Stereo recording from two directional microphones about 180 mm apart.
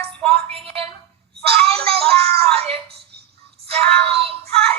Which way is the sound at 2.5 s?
35° right (ahead or behind).